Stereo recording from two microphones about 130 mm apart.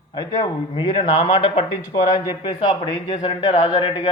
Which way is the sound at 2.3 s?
35° left (ahead or behind).